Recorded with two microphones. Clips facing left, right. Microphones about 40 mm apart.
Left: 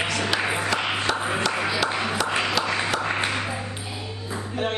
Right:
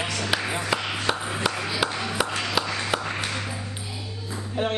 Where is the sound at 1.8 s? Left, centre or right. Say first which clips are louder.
Left 4 dB; left.